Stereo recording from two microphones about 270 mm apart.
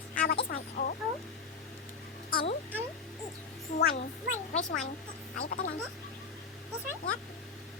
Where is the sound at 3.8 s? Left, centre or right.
Left.